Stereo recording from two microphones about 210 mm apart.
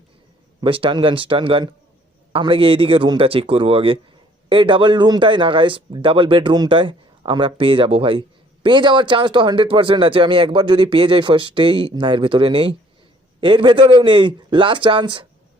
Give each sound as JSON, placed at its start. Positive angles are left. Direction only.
{"t": 0.6, "sound": "speech", "side_deg": -25}